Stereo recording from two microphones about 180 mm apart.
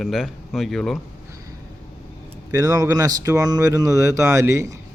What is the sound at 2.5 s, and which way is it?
Speech, 20° right (ahead or behind).